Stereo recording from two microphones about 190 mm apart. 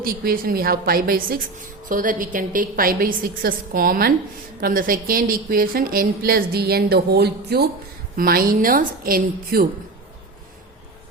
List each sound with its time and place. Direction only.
0.0 s a woman's voice: 50° right (ahead or behind)